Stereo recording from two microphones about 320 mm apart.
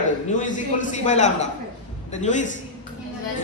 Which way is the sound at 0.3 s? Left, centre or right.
Left.